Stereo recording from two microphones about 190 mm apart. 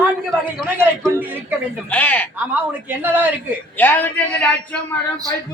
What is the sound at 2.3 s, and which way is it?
Speech, 10° right (ahead or behind).